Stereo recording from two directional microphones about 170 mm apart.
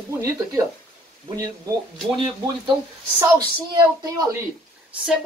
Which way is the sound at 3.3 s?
20° right (ahead or behind).